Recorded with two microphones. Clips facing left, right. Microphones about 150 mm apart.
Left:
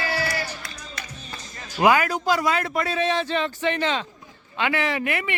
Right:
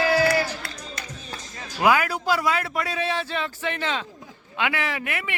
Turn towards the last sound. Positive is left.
turn(degrees=0)  # may be behind; listen again after turning